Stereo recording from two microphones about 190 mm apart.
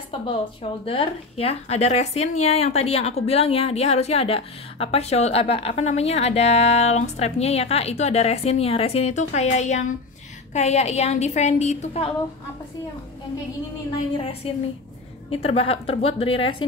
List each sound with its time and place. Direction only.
0.8 s speech: 30° left (ahead or behind)
14.1 s a woman's voice: 30° left (ahead or behind)